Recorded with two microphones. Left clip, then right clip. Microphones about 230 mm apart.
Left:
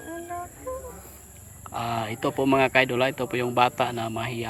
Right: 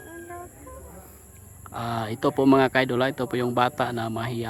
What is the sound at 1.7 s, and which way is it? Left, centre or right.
A man's voice, right.